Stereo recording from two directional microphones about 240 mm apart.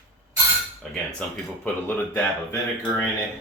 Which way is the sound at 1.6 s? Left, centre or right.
Centre.